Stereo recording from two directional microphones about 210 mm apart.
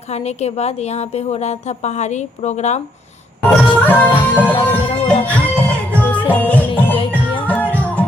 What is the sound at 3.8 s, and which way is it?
Music, 10° left (ahead or behind).